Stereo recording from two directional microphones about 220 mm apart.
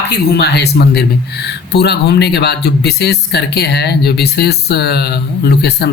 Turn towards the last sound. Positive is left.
turn(degrees=45)  # may be behind; listen again after turning